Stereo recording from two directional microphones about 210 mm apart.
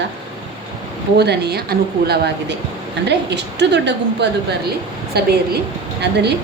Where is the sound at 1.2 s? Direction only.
50° right (ahead or behind).